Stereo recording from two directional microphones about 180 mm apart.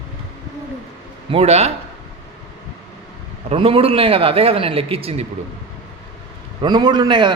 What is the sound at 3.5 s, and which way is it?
Speech, 30° right (ahead or behind).